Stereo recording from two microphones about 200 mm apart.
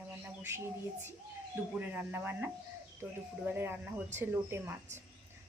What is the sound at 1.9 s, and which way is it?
Speech, 10° right (ahead or behind).